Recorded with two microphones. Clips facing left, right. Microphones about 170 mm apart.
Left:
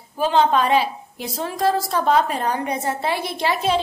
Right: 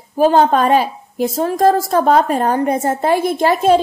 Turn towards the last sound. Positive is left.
turn(degrees=-50)  # may be behind; listen again after turning